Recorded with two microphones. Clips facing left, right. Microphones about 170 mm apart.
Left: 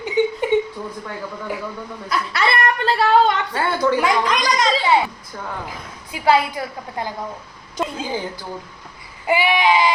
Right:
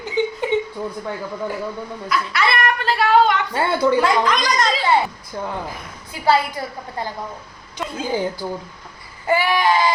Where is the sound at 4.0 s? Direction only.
10° left (ahead or behind).